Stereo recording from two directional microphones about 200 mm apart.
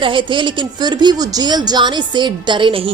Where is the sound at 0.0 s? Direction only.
25° right (ahead or behind).